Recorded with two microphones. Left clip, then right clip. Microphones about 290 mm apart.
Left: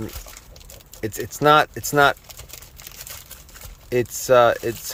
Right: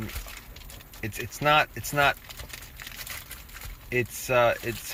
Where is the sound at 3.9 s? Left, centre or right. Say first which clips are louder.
Left 9 dB; centre.